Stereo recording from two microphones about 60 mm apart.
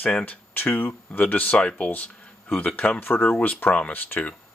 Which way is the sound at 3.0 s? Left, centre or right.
Left.